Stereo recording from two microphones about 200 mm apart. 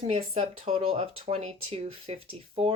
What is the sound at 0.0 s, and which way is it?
Speech, 30° right (ahead or behind).